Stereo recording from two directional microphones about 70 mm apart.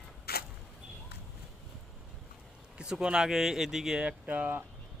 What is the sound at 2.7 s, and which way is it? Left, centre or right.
Speech, centre.